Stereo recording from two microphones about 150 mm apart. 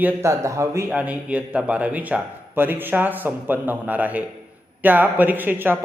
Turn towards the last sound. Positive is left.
turn(degrees=-15)  # may be behind; listen again after turning